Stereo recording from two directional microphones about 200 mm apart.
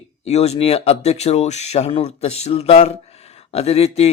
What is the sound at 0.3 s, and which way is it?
Speech, 30° left (ahead or behind).